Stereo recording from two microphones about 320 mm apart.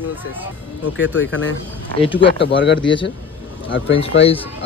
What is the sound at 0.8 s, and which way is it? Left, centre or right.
Speech, left.